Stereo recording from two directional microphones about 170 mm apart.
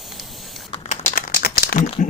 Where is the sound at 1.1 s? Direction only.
55° left (ahead or behind).